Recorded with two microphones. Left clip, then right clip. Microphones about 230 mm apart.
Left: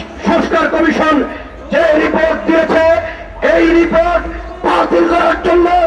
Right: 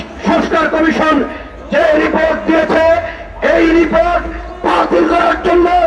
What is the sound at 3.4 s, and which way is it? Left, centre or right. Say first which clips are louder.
Speech: even; right.